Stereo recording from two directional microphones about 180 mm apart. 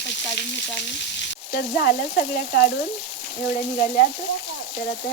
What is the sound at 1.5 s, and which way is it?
Speech, 60° left (ahead or behind).